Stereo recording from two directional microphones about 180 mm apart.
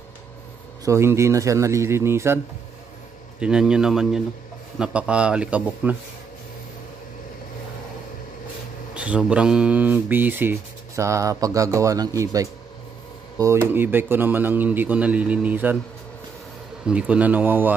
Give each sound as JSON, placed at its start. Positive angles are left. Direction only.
{"t": 0.8, "sound": "a man's voice", "side_deg": -15}
{"t": 8.9, "sound": "speech", "side_deg": -5}
{"t": 16.8, "sound": "speech", "side_deg": -5}